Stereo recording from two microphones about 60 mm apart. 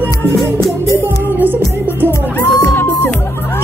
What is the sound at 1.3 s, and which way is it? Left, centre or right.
Music, right.